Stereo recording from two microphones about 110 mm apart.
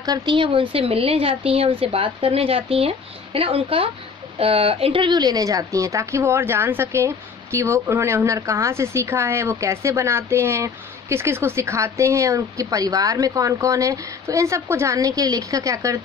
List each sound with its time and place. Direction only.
0.0 s a woman's voice: 40° right (ahead or behind)